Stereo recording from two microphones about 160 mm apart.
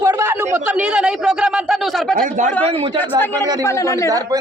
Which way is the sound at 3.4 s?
25° right (ahead or behind).